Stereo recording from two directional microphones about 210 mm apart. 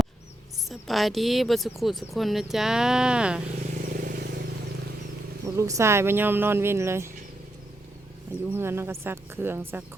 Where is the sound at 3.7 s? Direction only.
40° right (ahead or behind).